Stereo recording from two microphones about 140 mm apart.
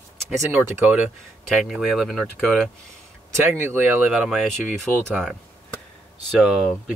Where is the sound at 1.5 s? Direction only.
Centre (ahead or behind).